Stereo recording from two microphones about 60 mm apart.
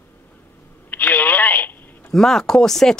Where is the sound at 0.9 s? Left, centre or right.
Left.